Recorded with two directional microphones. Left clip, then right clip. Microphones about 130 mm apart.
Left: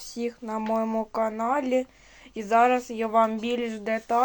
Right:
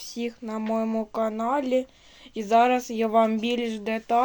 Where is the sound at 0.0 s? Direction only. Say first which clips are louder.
Left 1 dB; 25° right (ahead or behind).